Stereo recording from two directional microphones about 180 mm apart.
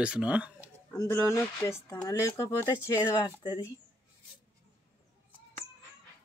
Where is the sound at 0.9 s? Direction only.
15° left (ahead or behind).